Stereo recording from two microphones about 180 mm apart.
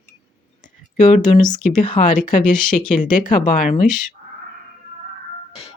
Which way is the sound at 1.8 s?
45° left (ahead or behind).